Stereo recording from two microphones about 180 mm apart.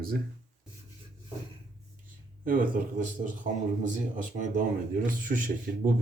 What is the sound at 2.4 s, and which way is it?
Speech, 50° right (ahead or behind).